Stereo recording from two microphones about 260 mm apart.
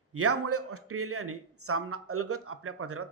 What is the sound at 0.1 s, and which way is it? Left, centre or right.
Speech, right.